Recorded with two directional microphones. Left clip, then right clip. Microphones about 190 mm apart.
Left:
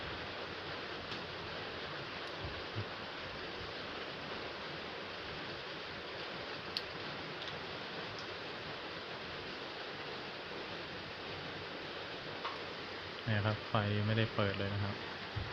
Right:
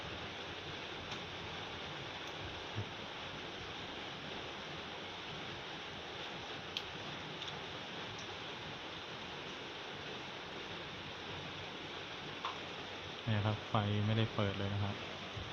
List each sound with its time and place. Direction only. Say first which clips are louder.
13.3 s speech: left 2 dB; centre (ahead or behind)